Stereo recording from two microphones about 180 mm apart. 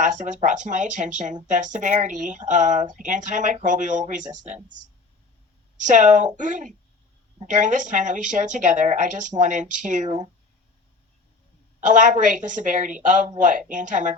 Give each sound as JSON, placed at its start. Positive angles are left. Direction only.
{"t": 0.0, "sound": "speech", "side_deg": -45}
{"t": 5.8, "sound": "speech", "side_deg": -45}
{"t": 11.8, "sound": "speech", "side_deg": -45}